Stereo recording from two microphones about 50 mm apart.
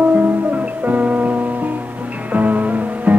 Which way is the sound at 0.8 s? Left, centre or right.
Right.